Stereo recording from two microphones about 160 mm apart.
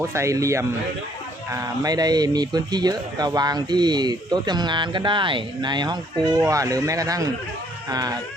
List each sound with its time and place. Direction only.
0.0 s speech: 15° right (ahead or behind)